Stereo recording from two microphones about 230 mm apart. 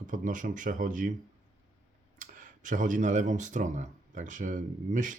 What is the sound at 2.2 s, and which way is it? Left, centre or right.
Speech, right.